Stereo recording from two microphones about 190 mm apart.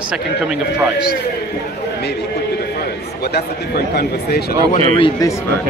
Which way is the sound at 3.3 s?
60° left (ahead or behind).